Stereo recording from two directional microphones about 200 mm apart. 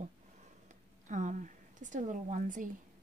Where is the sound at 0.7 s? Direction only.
40° right (ahead or behind).